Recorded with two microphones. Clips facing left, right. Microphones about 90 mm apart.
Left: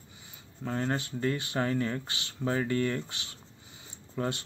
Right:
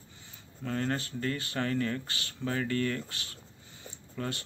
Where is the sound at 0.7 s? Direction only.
20° left (ahead or behind).